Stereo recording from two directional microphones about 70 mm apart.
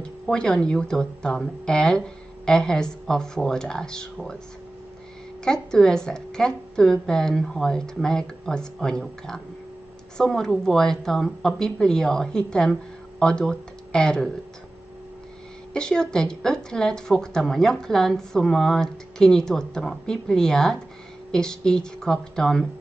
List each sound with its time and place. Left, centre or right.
0.0 s a woman's voice: centre
5.4 s a woman's voice: centre
15.7 s a woman's voice: centre